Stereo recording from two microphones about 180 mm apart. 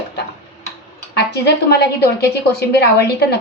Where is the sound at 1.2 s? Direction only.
65° left (ahead or behind).